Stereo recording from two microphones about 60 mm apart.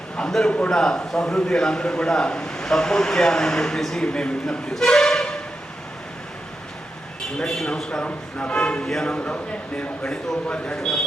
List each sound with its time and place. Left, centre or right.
0.2 s a man's voice: centre
4.7 s a sound: centre
7.3 s a man's voice: centre